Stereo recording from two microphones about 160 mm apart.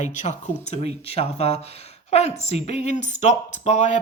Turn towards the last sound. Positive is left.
turn(degrees=50)  # may be behind; listen again after turning